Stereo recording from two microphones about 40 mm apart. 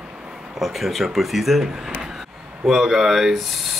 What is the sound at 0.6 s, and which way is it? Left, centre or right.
Speech, centre.